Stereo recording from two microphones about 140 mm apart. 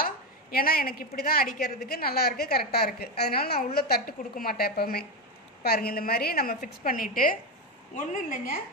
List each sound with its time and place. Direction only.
0.0 s a woman's voice: 90° left
7.9 s a woman's voice: 70° left (ahead or behind)